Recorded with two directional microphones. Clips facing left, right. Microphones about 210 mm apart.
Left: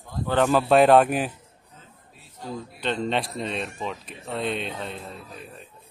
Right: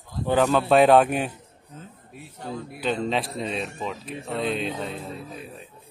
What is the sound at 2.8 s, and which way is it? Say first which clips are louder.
Speech: right 1 dB; centre (ahead or behind).